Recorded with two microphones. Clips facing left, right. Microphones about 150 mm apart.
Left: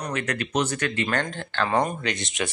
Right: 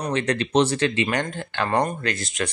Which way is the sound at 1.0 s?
10° right (ahead or behind).